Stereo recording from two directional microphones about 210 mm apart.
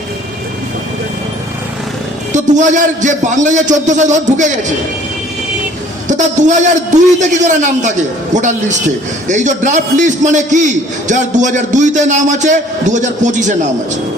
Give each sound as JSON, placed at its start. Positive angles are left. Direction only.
{"t": 2.3, "sound": "a man's voice", "side_deg": -35}
{"t": 6.1, "sound": "a man's voice", "side_deg": -35}